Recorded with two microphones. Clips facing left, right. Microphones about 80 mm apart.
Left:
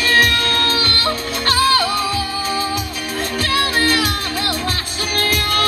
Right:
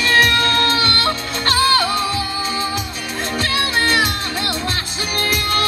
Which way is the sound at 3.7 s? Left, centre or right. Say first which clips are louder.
Even; right.